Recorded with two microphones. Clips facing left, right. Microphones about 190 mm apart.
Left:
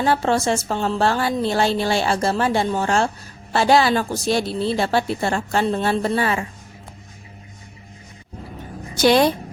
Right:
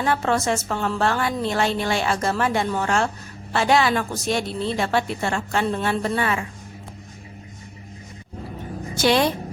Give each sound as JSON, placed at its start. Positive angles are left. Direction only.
{"t": 0.0, "sound": "speech", "side_deg": 30}
{"t": 9.0, "sound": "speech", "side_deg": 40}